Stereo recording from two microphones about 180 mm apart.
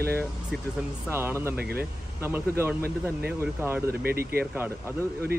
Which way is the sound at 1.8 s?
10° right (ahead or behind).